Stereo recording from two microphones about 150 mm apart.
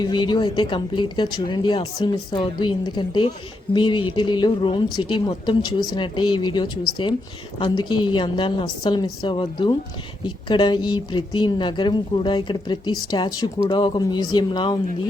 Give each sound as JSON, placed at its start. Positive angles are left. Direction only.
{"t": 0.0, "sound": "a woman's voice", "side_deg": 30}